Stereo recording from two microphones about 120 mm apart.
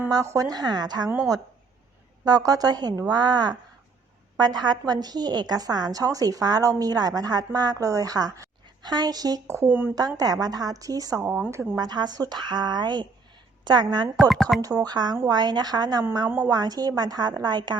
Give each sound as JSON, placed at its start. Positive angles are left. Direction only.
{"t": 0.1, "sound": "a woman's voice", "side_deg": -30}
{"t": 2.2, "sound": "a woman's voice", "side_deg": -30}
{"t": 9.6, "sound": "a woman's voice", "side_deg": -15}
{"t": 10.4, "sound": "a woman's voice", "side_deg": -30}
{"t": 11.3, "sound": "a woman's voice", "side_deg": -15}
{"t": 11.8, "sound": "a woman's voice", "side_deg": -35}
{"t": 14.2, "sound": "speech", "side_deg": 0}
{"t": 14.6, "sound": "a woman's voice", "side_deg": -30}